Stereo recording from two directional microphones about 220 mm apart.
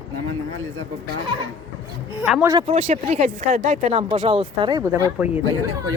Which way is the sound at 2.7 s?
30° right (ahead or behind).